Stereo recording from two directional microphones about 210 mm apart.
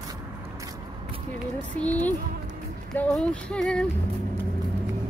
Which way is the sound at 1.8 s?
5° left (ahead or behind).